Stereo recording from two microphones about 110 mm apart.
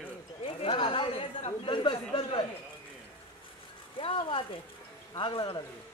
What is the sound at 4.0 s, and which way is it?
Speech, 50° left (ahead or behind).